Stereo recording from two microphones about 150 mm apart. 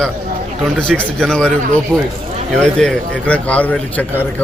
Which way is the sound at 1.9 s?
10° right (ahead or behind).